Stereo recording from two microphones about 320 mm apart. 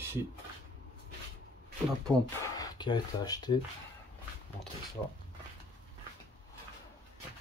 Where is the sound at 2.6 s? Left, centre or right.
Centre.